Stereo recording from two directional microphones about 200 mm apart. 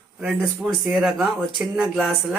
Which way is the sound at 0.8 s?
Centre (ahead or behind).